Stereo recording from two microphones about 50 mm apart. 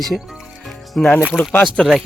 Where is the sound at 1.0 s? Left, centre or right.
Centre.